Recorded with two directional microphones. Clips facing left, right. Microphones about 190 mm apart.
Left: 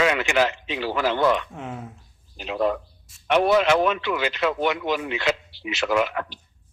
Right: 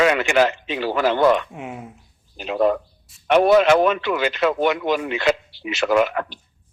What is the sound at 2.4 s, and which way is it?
Speech, 50° right (ahead or behind).